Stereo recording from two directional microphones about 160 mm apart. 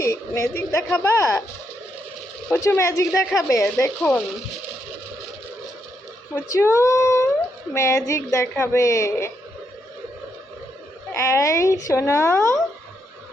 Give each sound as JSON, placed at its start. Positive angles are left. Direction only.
{"t": 0.0, "sound": "speech", "side_deg": 20}
{"t": 2.5, "sound": "speech", "side_deg": 15}
{"t": 6.3, "sound": "a woman's voice", "side_deg": 15}
{"t": 11.1, "sound": "a woman's voice", "side_deg": 20}